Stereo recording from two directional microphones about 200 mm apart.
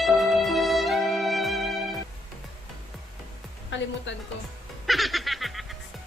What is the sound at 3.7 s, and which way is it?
Music, 65° left (ahead or behind).